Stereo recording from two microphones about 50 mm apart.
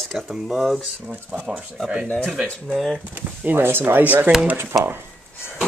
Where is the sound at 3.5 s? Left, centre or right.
Right.